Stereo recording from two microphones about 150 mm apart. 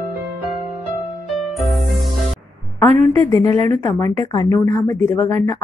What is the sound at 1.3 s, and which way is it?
Music, centre (ahead or behind).